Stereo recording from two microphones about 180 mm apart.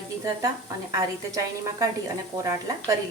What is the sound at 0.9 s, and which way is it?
A woman's voice, 20° right (ahead or behind).